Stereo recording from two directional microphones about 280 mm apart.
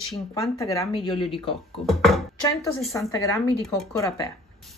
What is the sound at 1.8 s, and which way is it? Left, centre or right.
Speech, centre.